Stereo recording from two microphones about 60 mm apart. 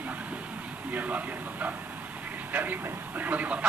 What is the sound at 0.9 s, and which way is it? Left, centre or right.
A man's voice, right.